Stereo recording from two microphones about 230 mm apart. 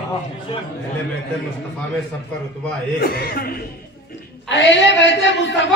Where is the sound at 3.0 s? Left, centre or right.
Left.